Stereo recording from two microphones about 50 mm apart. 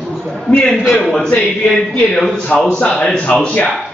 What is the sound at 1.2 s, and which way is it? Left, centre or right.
A man's voice, centre.